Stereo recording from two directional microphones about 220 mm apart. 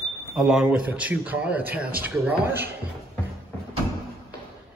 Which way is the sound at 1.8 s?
45° right (ahead or behind).